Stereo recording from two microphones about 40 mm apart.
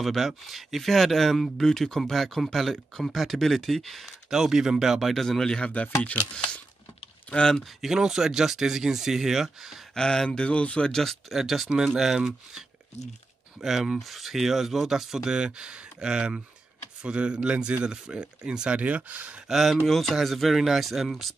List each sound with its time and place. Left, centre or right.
0.0 s speech: centre
4.3 s speech: centre
5.1 s speech: centre
7.2 s speech: left
7.6 s speech: centre
9.9 s speech: centre
10.9 s speech: centre
11.2 s speech: centre
13.6 s speech: centre
15.3 s speech: right
18.8 s speech: right
19.4 s speech: centre
19.9 s speech: centre